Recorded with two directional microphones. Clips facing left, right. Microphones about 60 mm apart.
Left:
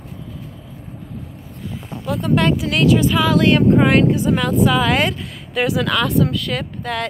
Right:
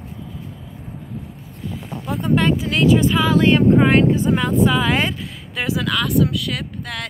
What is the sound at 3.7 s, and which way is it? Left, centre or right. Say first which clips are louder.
Speech: even; centre.